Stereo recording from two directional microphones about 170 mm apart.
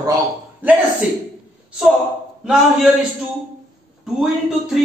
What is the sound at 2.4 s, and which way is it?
Speech, centre (ahead or behind).